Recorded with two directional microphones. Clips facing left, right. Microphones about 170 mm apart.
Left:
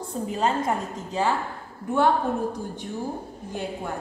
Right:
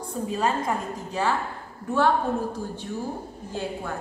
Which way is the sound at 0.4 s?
25° left (ahead or behind).